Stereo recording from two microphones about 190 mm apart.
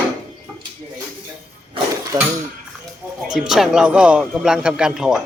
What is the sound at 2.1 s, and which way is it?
Speech, 25° right (ahead or behind).